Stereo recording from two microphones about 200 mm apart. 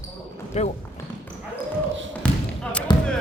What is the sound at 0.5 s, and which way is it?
Speech, 35° left (ahead or behind).